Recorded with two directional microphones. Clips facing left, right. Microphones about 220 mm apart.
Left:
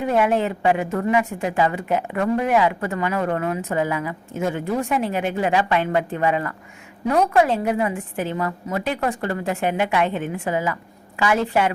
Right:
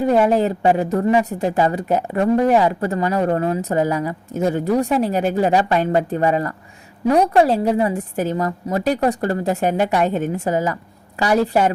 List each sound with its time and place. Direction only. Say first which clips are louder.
0.2 s a woman's voice: right 4 dB; 40° right (ahead or behind)